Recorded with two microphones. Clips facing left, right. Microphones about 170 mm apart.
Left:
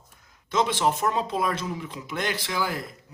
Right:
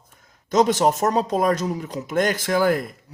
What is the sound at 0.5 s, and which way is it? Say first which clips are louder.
A man's voice: right 6 dB; 40° right (ahead or behind).